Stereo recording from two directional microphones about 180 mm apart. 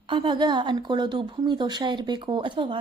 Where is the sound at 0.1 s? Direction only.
25° right (ahead or behind).